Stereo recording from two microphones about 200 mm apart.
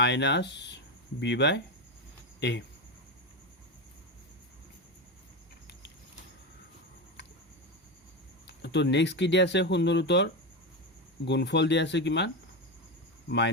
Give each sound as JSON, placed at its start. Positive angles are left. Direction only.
{"t": 0.0, "sound": "speech", "side_deg": 60}
{"t": 8.4, "sound": "speech", "side_deg": 60}